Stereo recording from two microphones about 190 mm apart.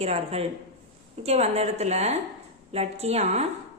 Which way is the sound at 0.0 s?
35° right (ahead or behind).